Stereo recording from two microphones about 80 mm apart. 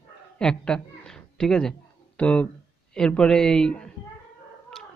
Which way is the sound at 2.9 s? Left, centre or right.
Centre.